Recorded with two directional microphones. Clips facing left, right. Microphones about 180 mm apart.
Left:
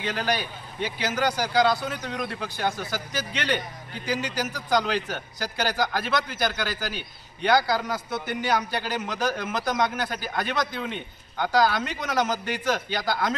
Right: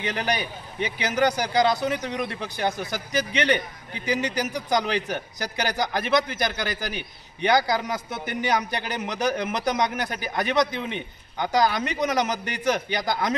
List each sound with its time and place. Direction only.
0.7 s a man's voice: 15° right (ahead or behind)